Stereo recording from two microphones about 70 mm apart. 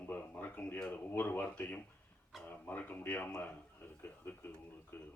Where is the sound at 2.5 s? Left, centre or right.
Left.